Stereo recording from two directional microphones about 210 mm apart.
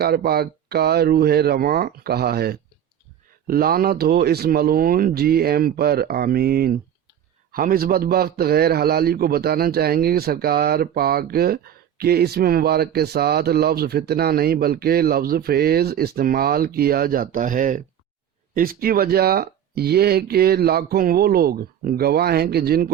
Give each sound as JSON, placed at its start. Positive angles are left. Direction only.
{"t": 0.0, "sound": "a man's voice", "side_deg": -50}